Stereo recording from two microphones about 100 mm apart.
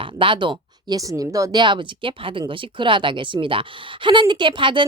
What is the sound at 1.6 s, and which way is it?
A woman's voice, 55° right (ahead or behind).